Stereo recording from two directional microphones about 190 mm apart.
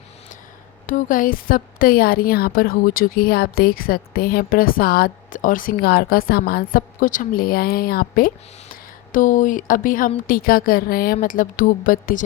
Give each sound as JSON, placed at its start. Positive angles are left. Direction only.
{"t": 0.9, "sound": "a woman's voice", "side_deg": 45}